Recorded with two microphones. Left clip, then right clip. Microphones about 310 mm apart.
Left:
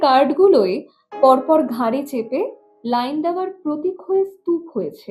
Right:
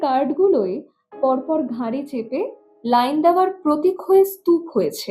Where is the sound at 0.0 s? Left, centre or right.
Left.